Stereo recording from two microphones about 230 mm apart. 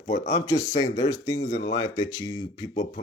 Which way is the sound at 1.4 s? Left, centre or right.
Left.